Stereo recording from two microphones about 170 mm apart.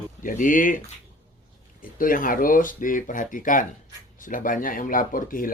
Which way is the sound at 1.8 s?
55° left (ahead or behind).